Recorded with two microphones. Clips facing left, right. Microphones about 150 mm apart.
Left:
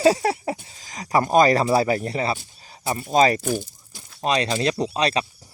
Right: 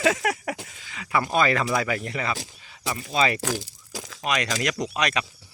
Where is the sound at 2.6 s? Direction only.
40° left (ahead or behind).